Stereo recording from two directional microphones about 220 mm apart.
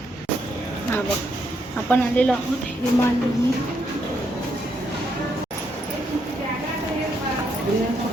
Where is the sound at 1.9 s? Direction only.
5° left (ahead or behind).